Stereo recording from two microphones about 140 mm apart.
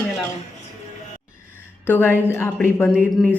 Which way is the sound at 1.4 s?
15° left (ahead or behind).